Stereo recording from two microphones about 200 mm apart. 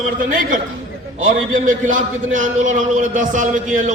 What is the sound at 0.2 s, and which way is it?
A man's voice, 45° right (ahead or behind).